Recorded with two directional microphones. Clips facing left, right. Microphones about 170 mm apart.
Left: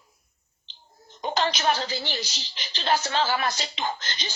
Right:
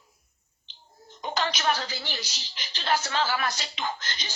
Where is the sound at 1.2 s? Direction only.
30° left (ahead or behind).